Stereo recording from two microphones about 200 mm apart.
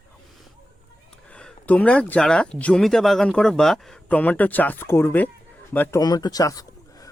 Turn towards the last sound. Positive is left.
turn(degrees=15)  # may be behind; listen again after turning